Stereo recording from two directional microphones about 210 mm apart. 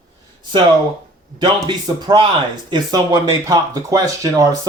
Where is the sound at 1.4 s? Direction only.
20° right (ahead or behind).